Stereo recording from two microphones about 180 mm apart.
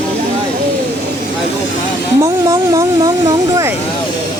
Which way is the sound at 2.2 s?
20° right (ahead or behind).